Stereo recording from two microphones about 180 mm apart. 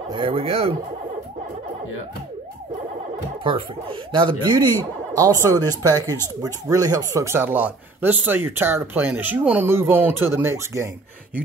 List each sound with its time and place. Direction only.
0.1 s speech: 30° right (ahead or behind)
3.4 s speech: 30° right (ahead or behind)
6.0 s speech: 15° left (ahead or behind)
6.4 s speech: 20° right (ahead or behind)